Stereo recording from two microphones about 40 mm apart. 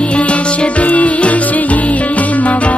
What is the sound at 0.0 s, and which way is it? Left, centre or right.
Music, left.